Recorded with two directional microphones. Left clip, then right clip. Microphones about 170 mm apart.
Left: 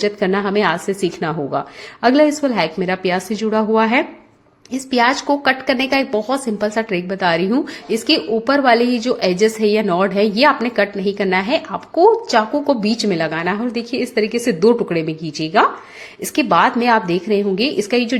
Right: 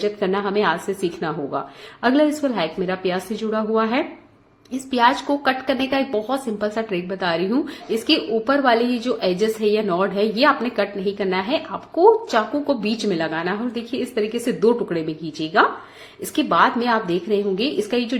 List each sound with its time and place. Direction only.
0.0 s a woman's voice: 45° left (ahead or behind)